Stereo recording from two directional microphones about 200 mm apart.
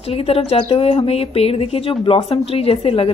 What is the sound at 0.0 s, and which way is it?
Speech, 30° left (ahead or behind).